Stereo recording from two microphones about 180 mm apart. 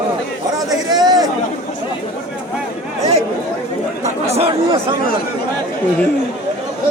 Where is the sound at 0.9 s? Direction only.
20° right (ahead or behind).